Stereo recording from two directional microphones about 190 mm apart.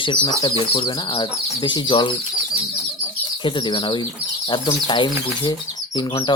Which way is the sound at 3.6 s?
25° left (ahead or behind).